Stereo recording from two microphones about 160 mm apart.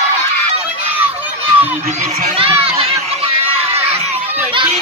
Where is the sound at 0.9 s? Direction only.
10° right (ahead or behind).